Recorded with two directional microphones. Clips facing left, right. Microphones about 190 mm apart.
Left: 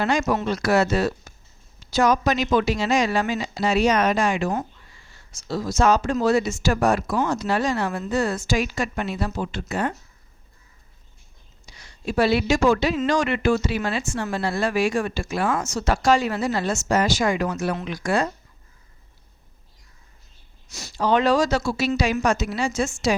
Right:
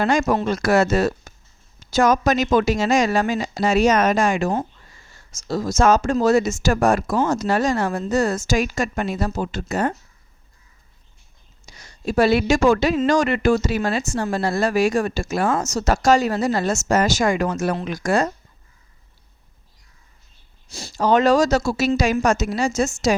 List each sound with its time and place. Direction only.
0.0 s speech: 50° right (ahead or behind)
11.6 s speech: 45° right (ahead or behind)
20.7 s speech: 30° right (ahead or behind)
20.9 s speech: 45° right (ahead or behind)